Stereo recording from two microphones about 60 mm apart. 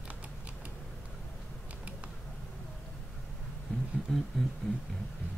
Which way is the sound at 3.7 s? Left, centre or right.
Left.